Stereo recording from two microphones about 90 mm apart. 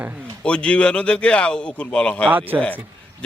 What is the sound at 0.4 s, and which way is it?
A man's voice, 10° left (ahead or behind).